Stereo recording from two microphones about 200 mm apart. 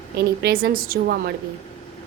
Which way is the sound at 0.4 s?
50° right (ahead or behind).